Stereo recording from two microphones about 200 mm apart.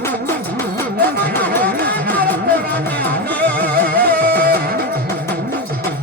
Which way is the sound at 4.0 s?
50° right (ahead or behind).